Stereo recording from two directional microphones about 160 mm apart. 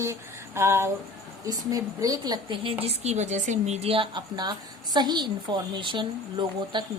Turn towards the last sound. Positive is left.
turn(degrees=-30)  # may be behind; listen again after turning